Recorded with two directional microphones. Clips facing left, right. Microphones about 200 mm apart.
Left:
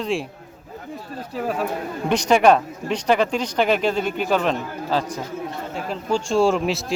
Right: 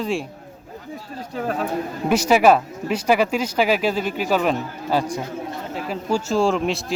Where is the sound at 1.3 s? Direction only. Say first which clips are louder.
Even; 5° left (ahead or behind).